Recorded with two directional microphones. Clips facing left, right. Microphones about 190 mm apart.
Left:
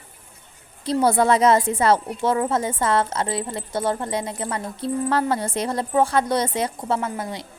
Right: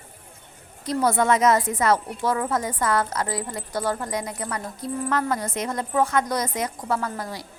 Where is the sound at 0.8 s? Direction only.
30° left (ahead or behind).